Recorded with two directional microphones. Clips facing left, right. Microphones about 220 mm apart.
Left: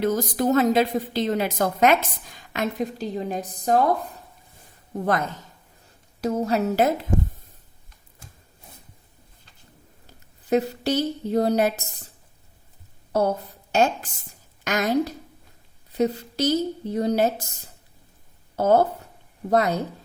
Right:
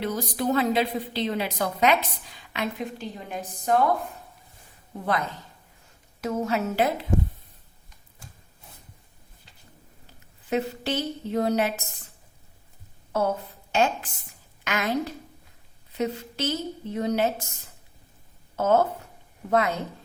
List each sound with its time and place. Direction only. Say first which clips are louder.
0.0 s a woman's voice: left 5 dB; 45° left (ahead or behind)
6.2 s a woman's voice: left 4 dB; 35° left (ahead or behind)
10.5 s a woman's voice: left 5 dB; 40° left (ahead or behind)
13.1 s a woman's voice: left 3 dB; 35° left (ahead or behind)
18.5 s a woman's voice: left 3 dB; 35° left (ahead or behind)